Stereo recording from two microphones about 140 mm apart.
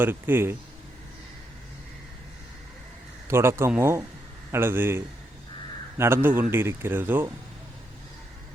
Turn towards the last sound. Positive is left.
turn(degrees=-15)  # may be behind; listen again after turning